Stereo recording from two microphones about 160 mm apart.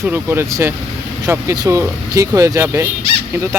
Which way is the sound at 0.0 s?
15° right (ahead or behind).